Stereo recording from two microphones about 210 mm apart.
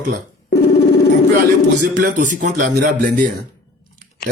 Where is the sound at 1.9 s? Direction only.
40° right (ahead or behind).